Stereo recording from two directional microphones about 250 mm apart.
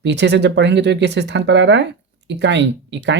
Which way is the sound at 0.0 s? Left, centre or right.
Right.